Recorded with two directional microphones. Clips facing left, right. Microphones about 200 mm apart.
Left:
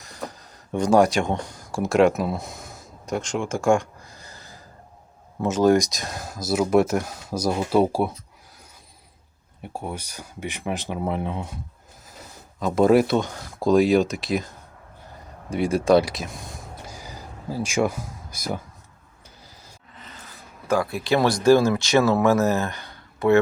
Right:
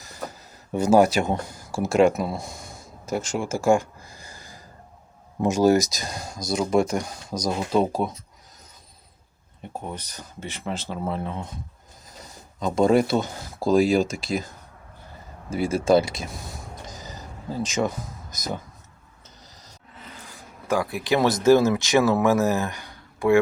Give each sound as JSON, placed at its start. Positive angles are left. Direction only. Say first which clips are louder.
{"t": 0.7, "sound": "speech", "louder": "even", "side_deg": -5}
{"t": 9.7, "sound": "speech", "louder": "left 2 dB", "side_deg": 10}
{"t": 12.2, "sound": "speech", "louder": "left 1 dB", "side_deg": 5}
{"t": 15.4, "sound": "speech", "louder": "left 1 dB", "side_deg": 0}
{"t": 16.8, "sound": "a sound", "louder": "even", "side_deg": 10}
{"t": 20.0, "sound": "speech", "louder": "right 2 dB", "side_deg": -10}